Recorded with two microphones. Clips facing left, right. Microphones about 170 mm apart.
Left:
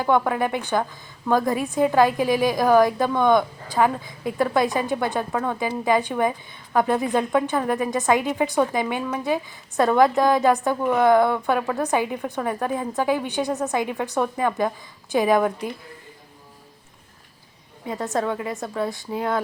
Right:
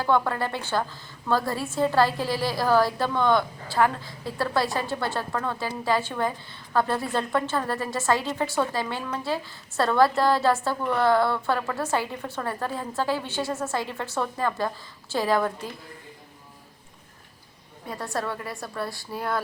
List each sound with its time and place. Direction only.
0.0 s a woman's voice: 15° left (ahead or behind)
18.0 s speech: 20° left (ahead or behind)